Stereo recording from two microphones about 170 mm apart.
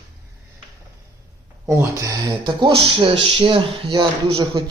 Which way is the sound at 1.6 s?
15° right (ahead or behind).